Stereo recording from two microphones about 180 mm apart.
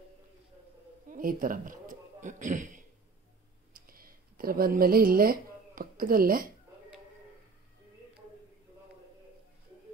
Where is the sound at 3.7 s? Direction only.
55° right (ahead or behind).